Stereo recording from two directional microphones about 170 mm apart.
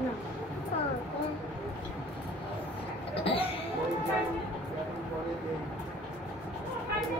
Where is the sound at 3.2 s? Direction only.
35° left (ahead or behind).